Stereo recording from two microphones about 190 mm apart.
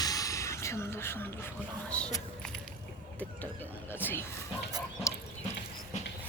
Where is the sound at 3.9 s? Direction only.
10° left (ahead or behind).